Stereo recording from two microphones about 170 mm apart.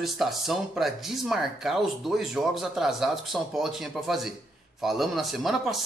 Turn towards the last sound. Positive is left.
turn(degrees=0)  # may be behind; listen again after turning